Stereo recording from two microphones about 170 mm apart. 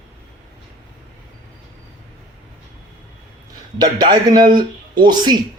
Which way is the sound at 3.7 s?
25° right (ahead or behind).